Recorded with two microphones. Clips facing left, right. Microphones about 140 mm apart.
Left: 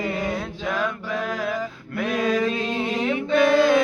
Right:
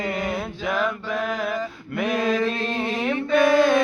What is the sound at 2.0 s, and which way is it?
Mantra, 5° left (ahead or behind).